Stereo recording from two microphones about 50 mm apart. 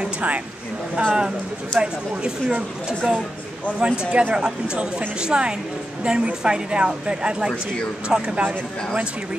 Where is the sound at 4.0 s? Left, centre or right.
Right.